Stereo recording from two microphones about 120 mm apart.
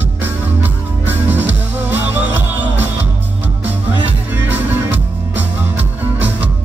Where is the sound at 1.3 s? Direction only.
15° right (ahead or behind).